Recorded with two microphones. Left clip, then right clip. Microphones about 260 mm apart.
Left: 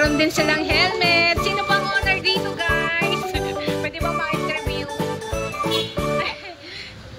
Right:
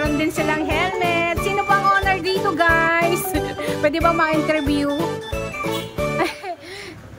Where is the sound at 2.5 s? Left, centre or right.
Right.